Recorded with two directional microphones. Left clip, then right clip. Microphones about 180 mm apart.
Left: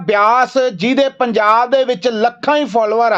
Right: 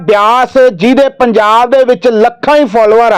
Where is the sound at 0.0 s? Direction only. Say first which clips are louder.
Right 5 dB; 40° right (ahead or behind).